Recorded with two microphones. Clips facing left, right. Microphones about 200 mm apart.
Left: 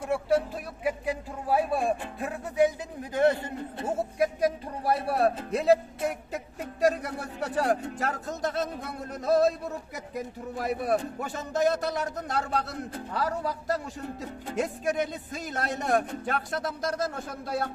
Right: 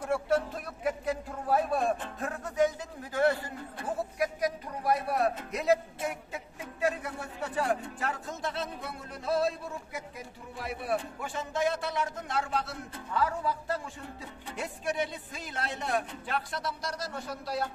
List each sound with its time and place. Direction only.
0.0 s speech: 5° left (ahead or behind); by 17.6 s 50° left (ahead or behind)